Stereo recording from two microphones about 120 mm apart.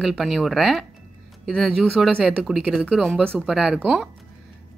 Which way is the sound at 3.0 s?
5° left (ahead or behind).